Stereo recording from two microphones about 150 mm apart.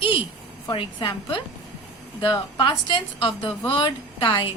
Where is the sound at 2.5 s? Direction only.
35° left (ahead or behind).